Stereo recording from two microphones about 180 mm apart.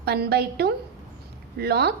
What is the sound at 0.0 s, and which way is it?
A woman's voice, 65° right (ahead or behind).